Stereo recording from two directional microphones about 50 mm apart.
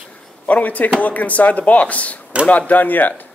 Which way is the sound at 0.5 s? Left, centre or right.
Left.